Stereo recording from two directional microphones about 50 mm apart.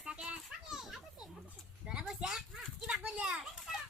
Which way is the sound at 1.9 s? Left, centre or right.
Centre.